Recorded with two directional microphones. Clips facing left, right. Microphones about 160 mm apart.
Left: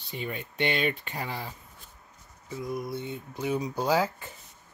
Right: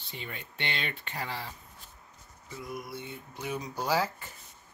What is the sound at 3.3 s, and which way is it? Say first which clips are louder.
Speech: left 6 dB; 20° left (ahead or behind).